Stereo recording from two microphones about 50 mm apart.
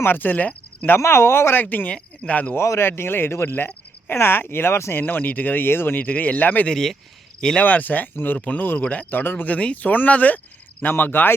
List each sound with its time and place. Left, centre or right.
0.0 s speech: left
0.9 s speech: left
1.7 s speech: left
2.6 s speech: left
6.0 s speech: left
6.7 s speech: centre
7.6 s speech: left
9.5 s speech: left
10.9 s speech: left